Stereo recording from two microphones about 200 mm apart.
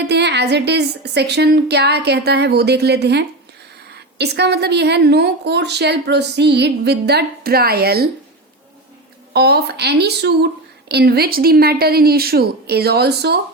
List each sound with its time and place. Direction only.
0.1 s a woman's voice: 55° right (ahead or behind)
9.3 s speech: 55° right (ahead or behind)